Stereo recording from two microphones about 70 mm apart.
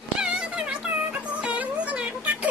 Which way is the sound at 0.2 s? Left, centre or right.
Centre.